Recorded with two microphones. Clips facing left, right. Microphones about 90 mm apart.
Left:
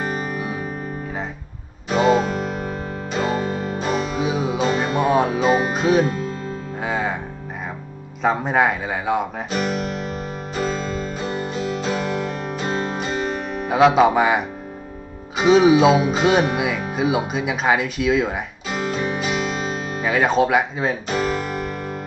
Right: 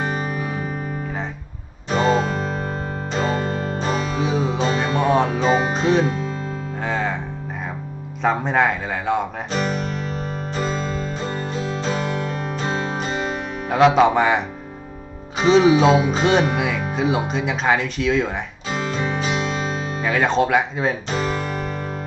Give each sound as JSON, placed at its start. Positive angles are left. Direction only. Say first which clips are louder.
{"t": 0.0, "sound": "music", "louder": "right 1 dB", "side_deg": 5}
{"t": 1.9, "sound": "music", "louder": "left 2 dB", "side_deg": 5}
{"t": 8.2, "sound": "guitar", "louder": "even", "side_deg": 5}
{"t": 11.5, "sound": "music", "louder": "left 1 dB", "side_deg": -35}
{"t": 11.8, "sound": "music", "louder": "right 1 dB", "side_deg": 5}
{"t": 13.7, "sound": "speech", "louder": "even", "side_deg": 5}
{"t": 19.3, "sound": "guitar", "louder": "even", "side_deg": 5}